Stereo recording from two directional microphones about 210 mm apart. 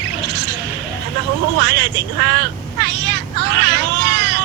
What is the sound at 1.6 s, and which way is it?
Vehicle, 50° right (ahead or behind).